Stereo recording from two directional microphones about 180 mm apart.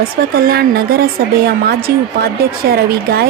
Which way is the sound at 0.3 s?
60° right (ahead or behind).